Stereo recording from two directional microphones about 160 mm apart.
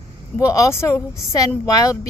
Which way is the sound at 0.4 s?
20° left (ahead or behind).